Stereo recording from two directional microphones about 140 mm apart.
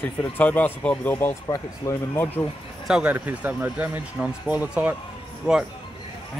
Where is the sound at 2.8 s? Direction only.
5° right (ahead or behind).